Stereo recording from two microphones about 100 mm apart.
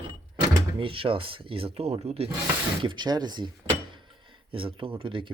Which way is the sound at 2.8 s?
50° right (ahead or behind).